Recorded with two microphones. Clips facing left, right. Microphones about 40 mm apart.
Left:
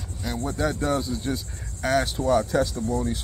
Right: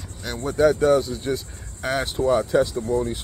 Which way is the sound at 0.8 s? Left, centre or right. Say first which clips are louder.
Right 7 dB; right.